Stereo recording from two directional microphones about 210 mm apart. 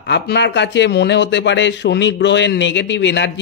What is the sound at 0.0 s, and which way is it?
A man's voice, 55° left (ahead or behind).